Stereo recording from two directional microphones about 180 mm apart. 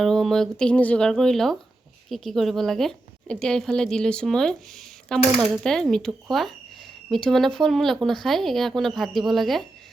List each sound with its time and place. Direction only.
0.0 s speech: centre (ahead or behind)